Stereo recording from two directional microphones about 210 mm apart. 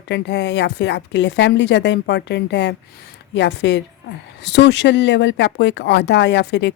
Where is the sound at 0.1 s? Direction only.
55° left (ahead or behind).